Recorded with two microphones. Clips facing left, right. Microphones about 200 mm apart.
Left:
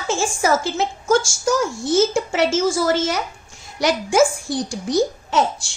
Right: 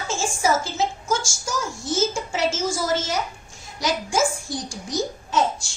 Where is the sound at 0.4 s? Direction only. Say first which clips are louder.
Left 1 dB; 65° left (ahead or behind).